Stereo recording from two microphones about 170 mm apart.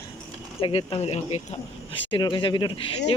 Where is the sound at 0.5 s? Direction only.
35° left (ahead or behind).